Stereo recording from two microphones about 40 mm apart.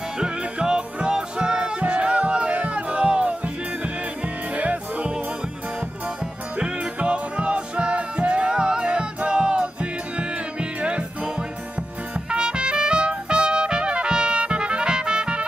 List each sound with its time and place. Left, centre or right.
0.2 s music: right
6.6 s music: right
12.3 s trumpet: right